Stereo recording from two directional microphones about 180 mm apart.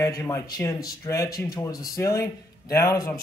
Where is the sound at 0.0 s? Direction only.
15° left (ahead or behind).